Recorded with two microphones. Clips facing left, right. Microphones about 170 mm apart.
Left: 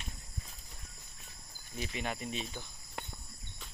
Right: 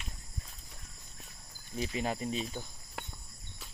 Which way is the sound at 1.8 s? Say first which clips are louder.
Right 4 dB; 30° right (ahead or behind).